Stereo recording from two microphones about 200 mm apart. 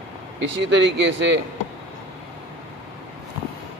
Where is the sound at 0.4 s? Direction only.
65° right (ahead or behind).